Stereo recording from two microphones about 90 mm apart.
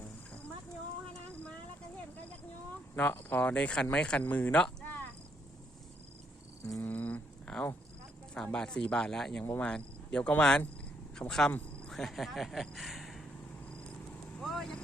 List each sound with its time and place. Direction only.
2.9 s speech: 20° left (ahead or behind)
6.8 s a sound: 20° left (ahead or behind)
8.4 s speech: 10° left (ahead or behind)
14.4 s vehicle: 5° left (ahead or behind)